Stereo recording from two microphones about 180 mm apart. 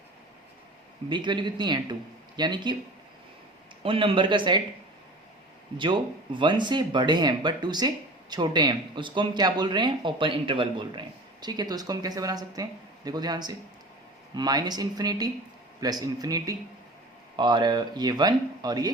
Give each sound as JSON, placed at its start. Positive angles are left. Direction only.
{"t": 1.1, "sound": "speech", "side_deg": -25}
{"t": 3.8, "sound": "speech", "side_deg": -30}
{"t": 5.7, "sound": "speech", "side_deg": -25}